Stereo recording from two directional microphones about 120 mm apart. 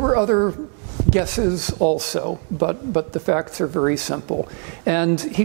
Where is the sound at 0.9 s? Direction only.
5° left (ahead or behind).